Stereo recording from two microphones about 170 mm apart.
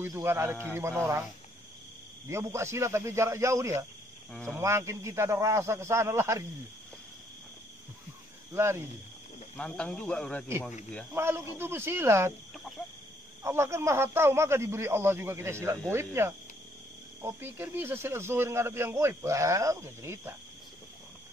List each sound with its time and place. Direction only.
0.0 s speech: 15° right (ahead or behind)
2.2 s speech: 15° right (ahead or behind)
4.3 s speech: 5° left (ahead or behind)
4.6 s speech: 15° right (ahead or behind)
8.5 s speech: 15° right (ahead or behind)
9.6 s speech: 5° left (ahead or behind)
11.1 s speech: 15° right (ahead or behind)
13.4 s speech: 15° right (ahead or behind)